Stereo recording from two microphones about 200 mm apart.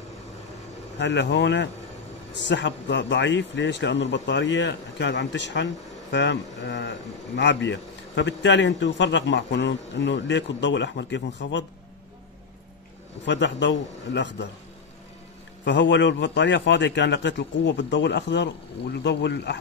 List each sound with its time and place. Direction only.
0.9 s a man's voice: 60° left (ahead or behind)
13.2 s a man's voice: 60° left (ahead or behind)
15.6 s a man's voice: 60° left (ahead or behind)